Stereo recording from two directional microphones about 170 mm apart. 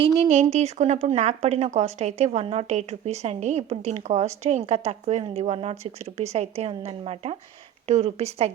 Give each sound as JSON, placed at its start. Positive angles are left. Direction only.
{"t": 0.0, "sound": "a woman's voice", "side_deg": -40}